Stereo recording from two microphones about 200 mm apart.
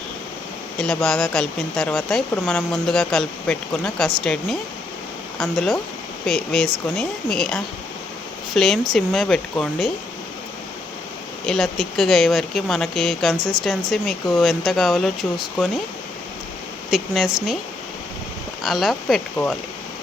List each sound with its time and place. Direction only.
0.8 s speech: centre (ahead or behind)
11.4 s speech: centre (ahead or behind)
13.3 s speech: 20° right (ahead or behind)
13.9 s speech: centre (ahead or behind)
16.9 s speech: 5° right (ahead or behind)
18.6 s speech: centre (ahead or behind)